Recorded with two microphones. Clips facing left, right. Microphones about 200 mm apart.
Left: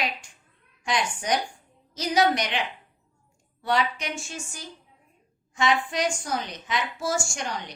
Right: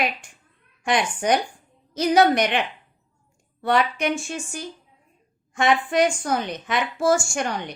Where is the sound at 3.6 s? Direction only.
55° right (ahead or behind).